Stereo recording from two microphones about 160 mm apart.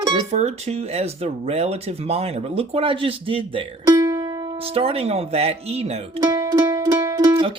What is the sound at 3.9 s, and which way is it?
Music, 20° right (ahead or behind).